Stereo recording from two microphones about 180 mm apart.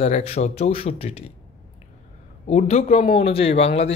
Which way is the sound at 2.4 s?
35° left (ahead or behind).